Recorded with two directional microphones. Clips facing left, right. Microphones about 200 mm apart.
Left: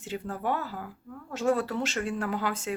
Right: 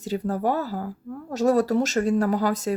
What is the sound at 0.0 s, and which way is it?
Speech, 40° right (ahead or behind).